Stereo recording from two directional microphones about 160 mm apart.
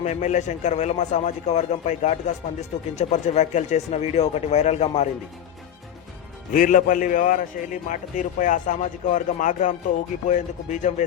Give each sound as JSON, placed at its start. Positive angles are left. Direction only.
{"t": 0.0, "sound": "a man's voice", "side_deg": 50}
{"t": 6.5, "sound": "a man's voice", "side_deg": 55}